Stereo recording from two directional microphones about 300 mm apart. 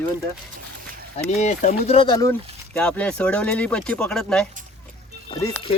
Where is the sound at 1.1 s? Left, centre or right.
Left.